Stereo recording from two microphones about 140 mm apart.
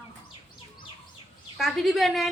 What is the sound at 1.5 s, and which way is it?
Speech, centre (ahead or behind).